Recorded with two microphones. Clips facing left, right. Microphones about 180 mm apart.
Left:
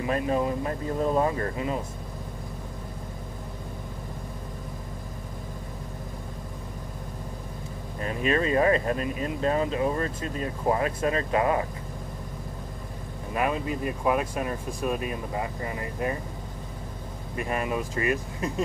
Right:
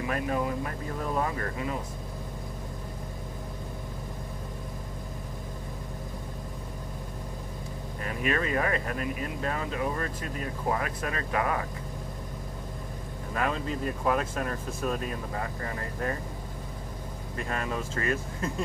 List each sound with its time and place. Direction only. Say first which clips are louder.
0.0 s speech: left 4 dB; 25° left (ahead or behind)
8.0 s speech: left 4 dB; 25° left (ahead or behind)
13.3 s speech: left 3 dB; 15° left (ahead or behind)
17.4 s speech: left 4 dB; 15° left (ahead or behind)